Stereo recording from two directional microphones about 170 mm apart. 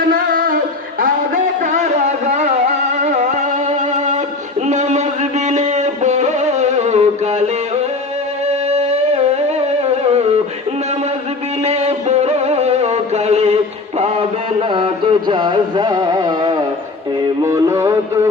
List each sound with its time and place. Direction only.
0.1 s music: 55° right (ahead or behind)
3.6 s music: 45° right (ahead or behind)
11.6 s music: 40° right (ahead or behind)
14.6 s music: 30° right (ahead or behind)